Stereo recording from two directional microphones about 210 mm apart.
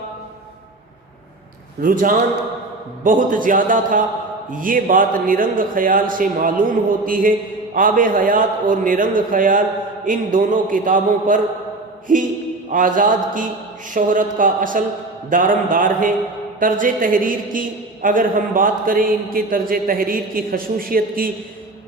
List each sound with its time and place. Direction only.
1.8 s a man's voice: 40° right (ahead or behind)